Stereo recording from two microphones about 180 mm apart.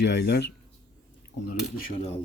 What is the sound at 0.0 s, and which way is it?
Speech, 70° left (ahead or behind).